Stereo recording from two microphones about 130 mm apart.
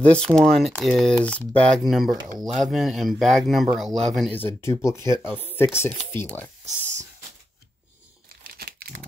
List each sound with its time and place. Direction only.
0.0 s speech: 10° left (ahead or behind)
4.4 s speech: 20° left (ahead or behind)